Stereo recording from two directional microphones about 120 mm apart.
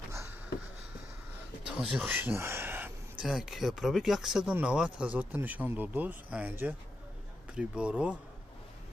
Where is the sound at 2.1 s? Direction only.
20° right (ahead or behind).